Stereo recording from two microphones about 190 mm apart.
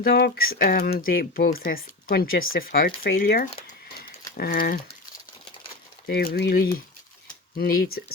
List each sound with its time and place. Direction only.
0.0 s speech: 55° left (ahead or behind)
6.1 s speech: 50° left (ahead or behind)